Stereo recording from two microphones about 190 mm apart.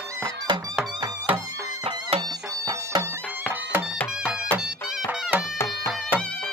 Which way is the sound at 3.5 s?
10° right (ahead or behind).